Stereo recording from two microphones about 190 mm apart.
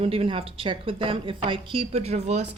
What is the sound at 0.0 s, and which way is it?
Speech, 30° right (ahead or behind).